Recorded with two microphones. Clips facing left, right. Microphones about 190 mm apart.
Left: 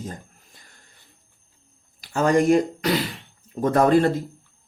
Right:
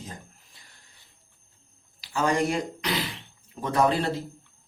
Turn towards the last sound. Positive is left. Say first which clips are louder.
# left 6 dB
turn(degrees=50)  # may be behind; listen again after turning